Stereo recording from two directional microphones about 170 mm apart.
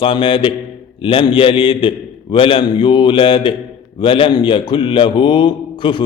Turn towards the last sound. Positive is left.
turn(degrees=30)  # may be behind; listen again after turning